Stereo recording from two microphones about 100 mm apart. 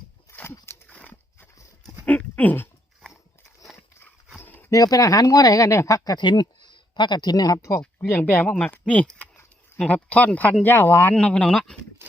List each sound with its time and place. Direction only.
0.3 s a sound: 25° left (ahead or behind)
0.9 s horse: 15° left (ahead or behind)
2.0 s dog: 15° left (ahead or behind)
4.4 s a sound: 20° left (ahead or behind)
4.7 s speech: 35° left (ahead or behind)
6.1 s speech: 50° left (ahead or behind); by 11.1 s 20° left (ahead or behind)
11.1 s speech: 10° left (ahead or behind)